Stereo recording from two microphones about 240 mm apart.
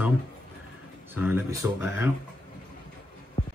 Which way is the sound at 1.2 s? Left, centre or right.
Centre.